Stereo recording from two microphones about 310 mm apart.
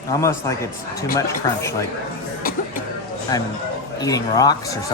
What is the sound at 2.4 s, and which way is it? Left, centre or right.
Music, left.